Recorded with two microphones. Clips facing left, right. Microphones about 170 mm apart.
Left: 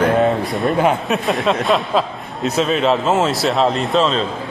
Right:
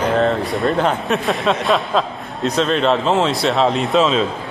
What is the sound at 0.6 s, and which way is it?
Speech, 5° left (ahead or behind).